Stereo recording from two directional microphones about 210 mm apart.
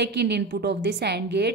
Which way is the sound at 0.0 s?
50° right (ahead or behind).